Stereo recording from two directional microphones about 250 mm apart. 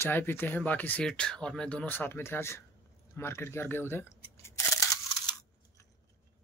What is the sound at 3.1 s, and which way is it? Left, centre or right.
Camera, centre.